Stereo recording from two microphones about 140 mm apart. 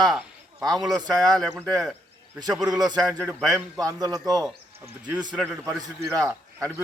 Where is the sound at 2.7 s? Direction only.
30° right (ahead or behind).